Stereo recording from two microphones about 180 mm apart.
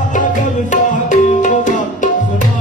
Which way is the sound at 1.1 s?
45° left (ahead or behind).